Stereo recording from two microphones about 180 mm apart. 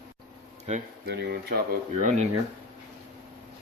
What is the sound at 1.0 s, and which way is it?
Speech, 65° right (ahead or behind).